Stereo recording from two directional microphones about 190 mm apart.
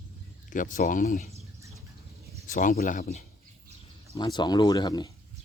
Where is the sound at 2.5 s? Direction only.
45° left (ahead or behind).